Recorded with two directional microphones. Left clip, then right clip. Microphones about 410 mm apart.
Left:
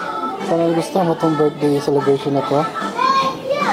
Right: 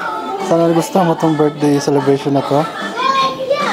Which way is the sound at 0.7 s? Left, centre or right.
Right.